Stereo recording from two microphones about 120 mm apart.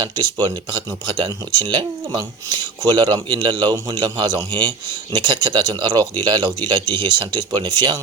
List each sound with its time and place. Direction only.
0.0 s speech: 35° right (ahead or behind)